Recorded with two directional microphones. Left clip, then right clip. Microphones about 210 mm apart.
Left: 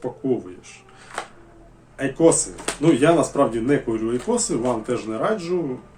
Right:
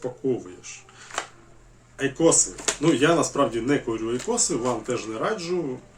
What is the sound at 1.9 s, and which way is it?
Speech, 5° left (ahead or behind).